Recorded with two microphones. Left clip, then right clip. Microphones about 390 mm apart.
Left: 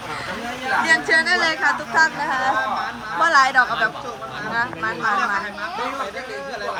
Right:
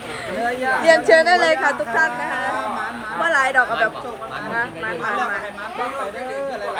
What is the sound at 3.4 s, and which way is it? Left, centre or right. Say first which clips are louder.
Speech: left 1 dB; centre.